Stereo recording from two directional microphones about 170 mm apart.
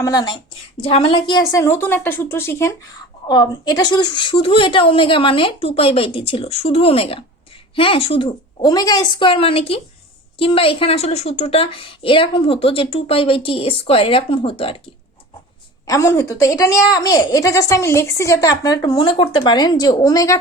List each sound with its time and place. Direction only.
0.0 s a woman's voice: 25° left (ahead or behind)
15.9 s a woman's voice: 15° left (ahead or behind)